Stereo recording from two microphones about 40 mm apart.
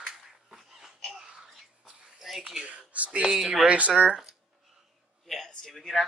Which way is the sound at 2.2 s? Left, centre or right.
Centre.